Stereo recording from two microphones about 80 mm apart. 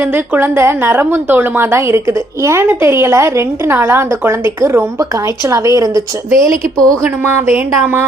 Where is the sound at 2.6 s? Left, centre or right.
Right.